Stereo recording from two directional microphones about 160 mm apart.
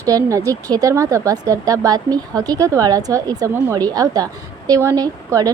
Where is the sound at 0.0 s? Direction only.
20° right (ahead or behind).